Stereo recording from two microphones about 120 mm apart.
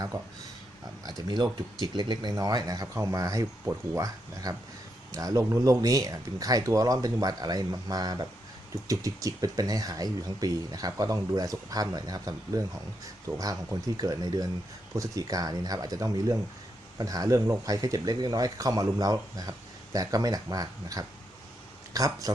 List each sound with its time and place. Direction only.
1.0 s speech: 35° right (ahead or behind)